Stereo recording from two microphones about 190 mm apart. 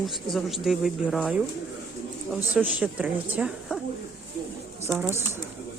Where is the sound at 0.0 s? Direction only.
Centre (ahead or behind).